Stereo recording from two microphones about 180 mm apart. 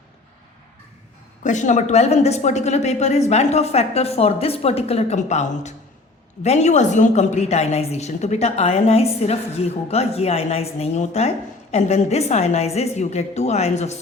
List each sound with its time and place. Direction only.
1.5 s a woman's voice: 45° left (ahead or behind)